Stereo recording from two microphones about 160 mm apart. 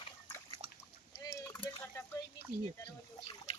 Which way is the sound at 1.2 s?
20° left (ahead or behind).